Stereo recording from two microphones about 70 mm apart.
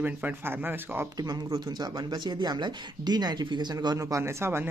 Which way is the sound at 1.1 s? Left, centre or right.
Right.